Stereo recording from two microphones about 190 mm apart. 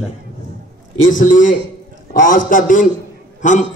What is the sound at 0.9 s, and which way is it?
Speech, 90° left.